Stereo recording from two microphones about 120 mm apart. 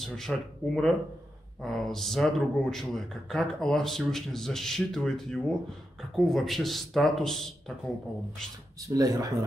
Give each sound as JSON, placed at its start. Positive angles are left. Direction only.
{"t": 0.0, "sound": "a man's voice", "side_deg": 5}
{"t": 8.8, "sound": "speech", "side_deg": -30}